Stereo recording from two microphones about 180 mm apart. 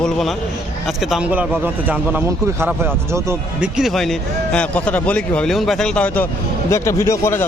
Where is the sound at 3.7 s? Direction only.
Centre (ahead or behind).